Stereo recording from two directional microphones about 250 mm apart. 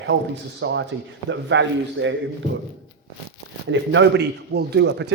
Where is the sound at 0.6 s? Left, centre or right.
Right.